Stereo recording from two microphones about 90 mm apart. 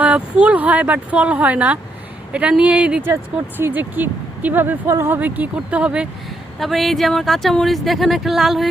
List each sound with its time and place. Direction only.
0.0 s speech: 10° right (ahead or behind)
6.6 s speech: centre (ahead or behind)